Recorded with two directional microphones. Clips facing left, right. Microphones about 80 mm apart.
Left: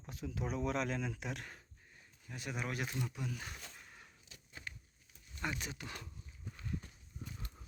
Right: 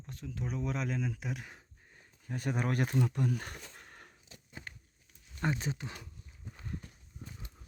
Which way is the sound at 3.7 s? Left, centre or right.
Right.